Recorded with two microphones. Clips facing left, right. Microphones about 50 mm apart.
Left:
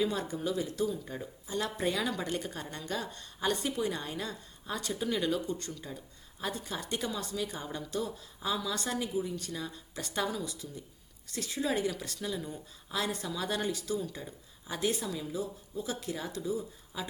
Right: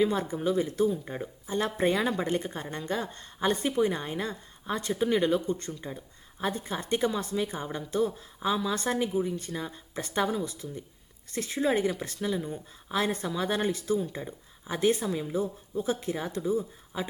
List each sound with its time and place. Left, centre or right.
0.0 s a woman's voice: right